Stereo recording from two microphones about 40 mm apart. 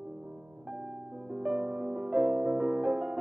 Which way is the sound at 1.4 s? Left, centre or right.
Centre.